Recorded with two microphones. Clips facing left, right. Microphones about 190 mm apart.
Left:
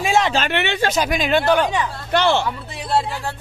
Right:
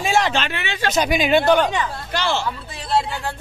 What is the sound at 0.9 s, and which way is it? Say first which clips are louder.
Speech: right 5 dB; centre (ahead or behind).